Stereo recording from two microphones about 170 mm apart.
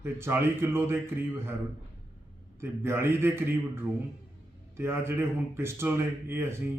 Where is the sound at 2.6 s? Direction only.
15° right (ahead or behind).